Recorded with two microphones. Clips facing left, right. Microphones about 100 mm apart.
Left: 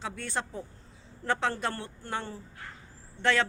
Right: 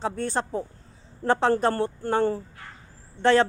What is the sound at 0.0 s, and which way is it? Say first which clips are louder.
Speech: right 8 dB; 35° right (ahead or behind).